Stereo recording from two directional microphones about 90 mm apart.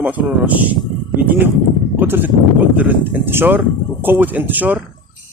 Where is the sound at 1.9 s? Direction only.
25° right (ahead or behind).